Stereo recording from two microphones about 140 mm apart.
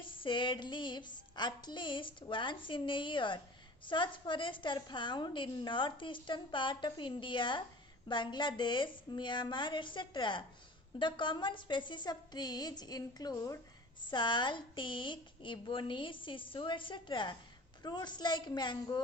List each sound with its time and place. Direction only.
0.0 s a woman's voice: 35° left (ahead or behind)